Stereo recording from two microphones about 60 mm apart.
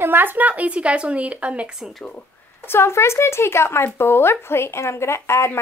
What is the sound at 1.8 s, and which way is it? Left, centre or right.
Speech, centre.